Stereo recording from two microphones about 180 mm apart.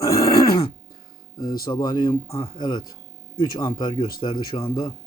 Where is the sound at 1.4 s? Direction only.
55° left (ahead or behind).